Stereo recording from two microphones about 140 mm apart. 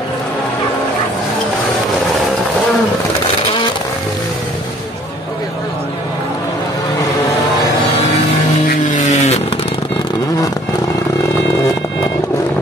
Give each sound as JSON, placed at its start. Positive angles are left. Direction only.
{"t": 8.6, "sound": "vehicle", "side_deg": 65}